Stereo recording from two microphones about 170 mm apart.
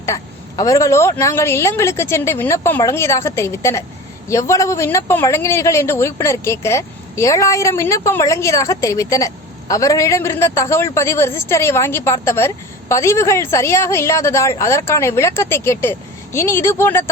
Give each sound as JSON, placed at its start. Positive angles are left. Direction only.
{"t": 0.0, "sound": "a woman's voice", "side_deg": 20}